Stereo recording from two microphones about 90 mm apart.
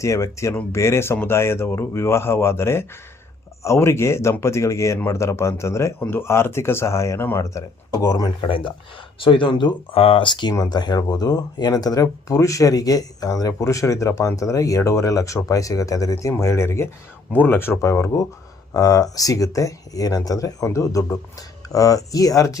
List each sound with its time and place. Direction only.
0.0 s speech: 35° left (ahead or behind)
8.4 s speech: 70° left (ahead or behind)
10.7 s speech: 50° left (ahead or behind); by 18.3 s 30° left (ahead or behind)
18.7 s speech: 40° left (ahead or behind)